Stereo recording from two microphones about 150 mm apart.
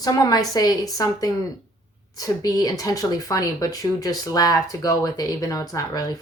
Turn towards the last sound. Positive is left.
turn(degrees=25)  # may be behind; listen again after turning